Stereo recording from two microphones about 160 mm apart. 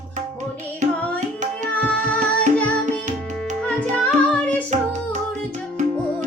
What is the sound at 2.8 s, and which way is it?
Music, 50° right (ahead or behind).